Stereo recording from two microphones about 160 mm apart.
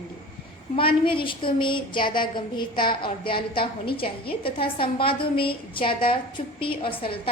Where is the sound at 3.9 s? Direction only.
70° left (ahead or behind).